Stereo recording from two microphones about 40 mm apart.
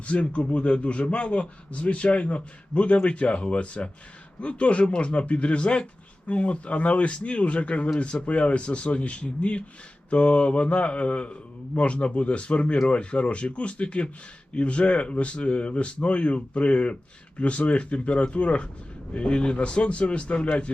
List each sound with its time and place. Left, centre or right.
0.0 s a man's voice: left